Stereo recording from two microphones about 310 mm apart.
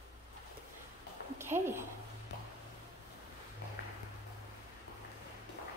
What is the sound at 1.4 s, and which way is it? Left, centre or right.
Speech, centre.